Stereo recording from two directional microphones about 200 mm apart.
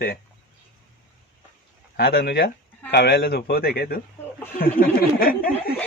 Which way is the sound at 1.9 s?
50° left (ahead or behind).